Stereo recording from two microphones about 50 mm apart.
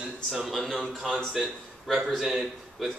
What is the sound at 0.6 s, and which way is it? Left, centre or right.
Speech, centre.